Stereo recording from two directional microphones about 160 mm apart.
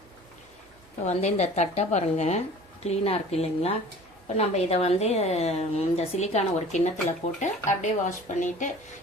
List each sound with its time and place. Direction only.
1.0 s a woman's voice: 45° left (ahead or behind)